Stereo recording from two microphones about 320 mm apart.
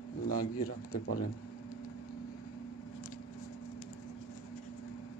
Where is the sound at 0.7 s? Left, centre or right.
Left.